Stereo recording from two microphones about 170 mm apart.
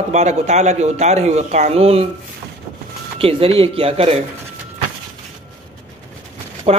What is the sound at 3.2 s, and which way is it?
Speech, 35° right (ahead or behind).